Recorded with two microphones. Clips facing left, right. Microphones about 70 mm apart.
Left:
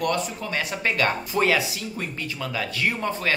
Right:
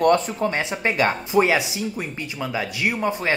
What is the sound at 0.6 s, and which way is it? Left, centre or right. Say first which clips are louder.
Speech: left 1 dB; right.